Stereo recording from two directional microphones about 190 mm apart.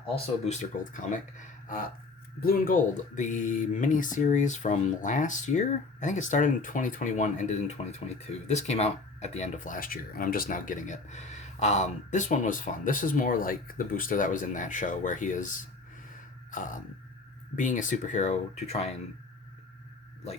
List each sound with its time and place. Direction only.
0.4 s speech: 40° left (ahead or behind)
16.5 s throat clearing: 45° left (ahead or behind)
17.6 s speech: 40° left (ahead or behind)